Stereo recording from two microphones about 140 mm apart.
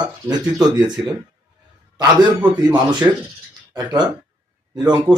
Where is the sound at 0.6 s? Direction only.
30° right (ahead or behind).